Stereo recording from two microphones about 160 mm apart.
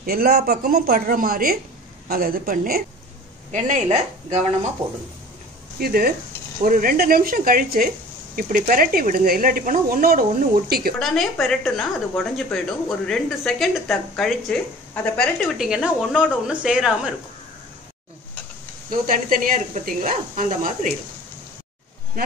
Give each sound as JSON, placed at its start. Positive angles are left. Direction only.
{"t": 0.0, "sound": "a woman's voice", "side_deg": -70}
{"t": 3.5, "sound": "speech", "side_deg": -50}
{"t": 5.8, "sound": "a woman's voice", "side_deg": -70}
{"t": 11.0, "sound": "a woman's voice", "side_deg": 0}
{"t": 18.9, "sound": "speech", "side_deg": -55}